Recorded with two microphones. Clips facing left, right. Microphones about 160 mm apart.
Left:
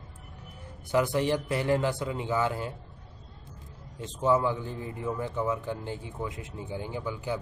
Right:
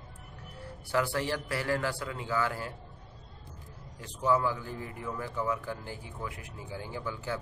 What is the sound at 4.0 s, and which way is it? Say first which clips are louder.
A man's voice: left 3 dB; 20° left (ahead or behind).